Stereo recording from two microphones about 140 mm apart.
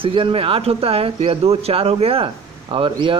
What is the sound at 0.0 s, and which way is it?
Speech, 40° right (ahead or behind).